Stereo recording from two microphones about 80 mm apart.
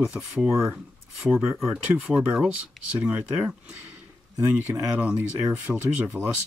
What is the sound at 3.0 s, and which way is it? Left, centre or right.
Speech, centre.